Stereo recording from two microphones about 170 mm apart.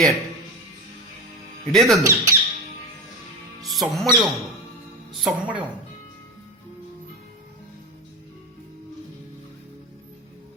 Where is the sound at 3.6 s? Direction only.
Centre (ahead or behind).